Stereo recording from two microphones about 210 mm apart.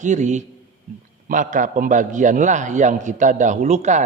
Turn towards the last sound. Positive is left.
turn(degrees=-35)  # may be behind; listen again after turning